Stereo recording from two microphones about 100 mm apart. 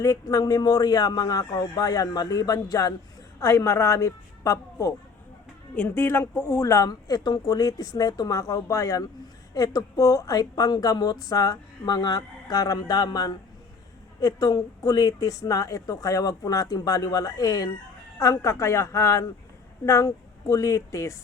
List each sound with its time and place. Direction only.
0.0 s a woman's voice: 30° left (ahead or behind)
5.7 s a woman's voice: 20° left (ahead or behind)